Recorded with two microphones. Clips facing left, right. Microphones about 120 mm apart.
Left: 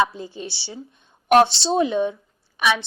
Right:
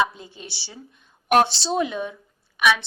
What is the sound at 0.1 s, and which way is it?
A woman's voice, 30° left (ahead or behind).